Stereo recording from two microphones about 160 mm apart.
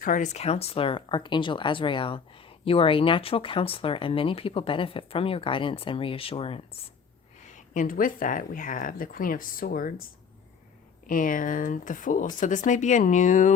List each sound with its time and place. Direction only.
0.0 s speech: 55° left (ahead or behind); by 6.8 s 35° left (ahead or behind)
7.5 s speech: 55° left (ahead or behind)
11.0 s speech: 60° left (ahead or behind)